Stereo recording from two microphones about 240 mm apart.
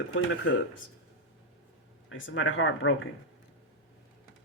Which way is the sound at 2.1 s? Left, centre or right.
Left.